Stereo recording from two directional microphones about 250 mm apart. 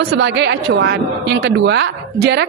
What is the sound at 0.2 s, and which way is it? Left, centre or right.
A woman's voice, right.